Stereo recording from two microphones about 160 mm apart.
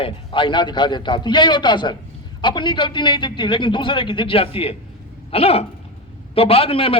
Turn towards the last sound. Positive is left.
turn(degrees=35)  # may be behind; listen again after turning